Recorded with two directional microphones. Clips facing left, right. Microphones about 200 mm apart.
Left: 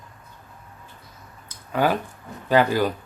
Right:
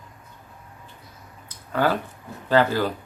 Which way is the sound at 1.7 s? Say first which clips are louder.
Left 1 dB; 15° left (ahead or behind).